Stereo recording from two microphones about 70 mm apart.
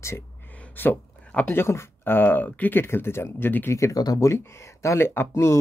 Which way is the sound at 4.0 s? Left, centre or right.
Left.